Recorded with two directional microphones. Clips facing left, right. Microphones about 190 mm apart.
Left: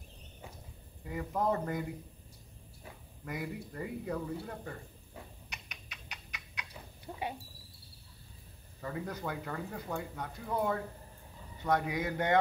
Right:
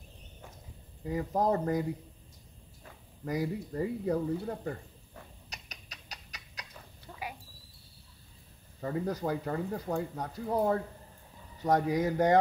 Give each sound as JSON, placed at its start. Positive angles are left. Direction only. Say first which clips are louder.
{"t": 1.0, "sound": "speech", "louder": "right 4 dB", "side_deg": -35}
{"t": 3.3, "sound": "speech", "louder": "right 7 dB", "side_deg": -35}
{"t": 5.5, "sound": "cat", "louder": "right 1 dB", "side_deg": -40}
{"t": 7.1, "sound": "a sound", "louder": "left 3 dB", "side_deg": 25}
{"t": 8.8, "sound": "speech", "louder": "right 6 dB", "side_deg": -35}